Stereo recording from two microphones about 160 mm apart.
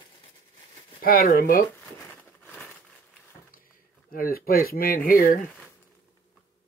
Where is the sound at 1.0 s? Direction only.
65° left (ahead or behind).